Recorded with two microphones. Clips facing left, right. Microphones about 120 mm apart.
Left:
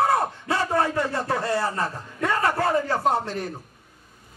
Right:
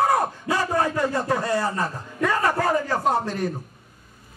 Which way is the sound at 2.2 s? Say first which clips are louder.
Right 1 dB; 30° left (ahead or behind).